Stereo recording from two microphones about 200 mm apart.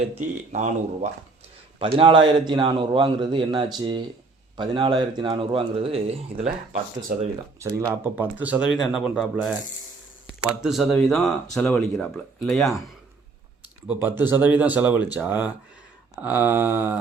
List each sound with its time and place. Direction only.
0.1 s speech: 35° right (ahead or behind)
1.8 s a man's voice: 25° right (ahead or behind)
7.6 s speech: 10° right (ahead or behind)
13.8 s speech: 10° right (ahead or behind)